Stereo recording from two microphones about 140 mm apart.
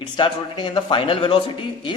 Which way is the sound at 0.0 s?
35° left (ahead or behind).